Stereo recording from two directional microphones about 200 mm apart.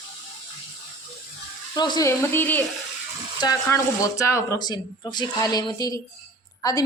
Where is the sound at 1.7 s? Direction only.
20° left (ahead or behind).